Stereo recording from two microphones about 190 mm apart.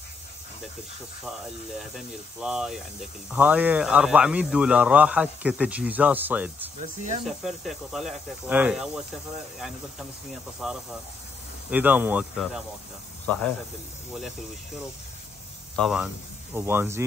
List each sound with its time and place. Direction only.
1.8 s speech: 5° right (ahead or behind)
6.8 s speech: 40° right (ahead or behind)
7.2 s speech: centre (ahead or behind)
15.7 s speech: centre (ahead or behind)
16.5 s speech: 10° right (ahead or behind)